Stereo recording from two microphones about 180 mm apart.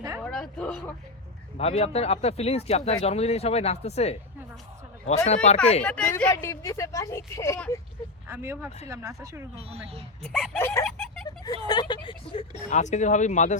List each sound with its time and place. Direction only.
0.2 s a sound: 5° left (ahead or behind)
1.5 s speech: 35° left (ahead or behind)
5.8 s speech: 10° left (ahead or behind)
8.3 s speech: 10° right (ahead or behind)
9.6 s speech: 35° right (ahead or behind)
10.2 s speech: centre (ahead or behind)
10.6 s speech: 15° left (ahead or behind)
10.8 s a sound: 5° left (ahead or behind)
11.6 s speech: 25° left (ahead or behind); by 13.6 s 40° left (ahead or behind)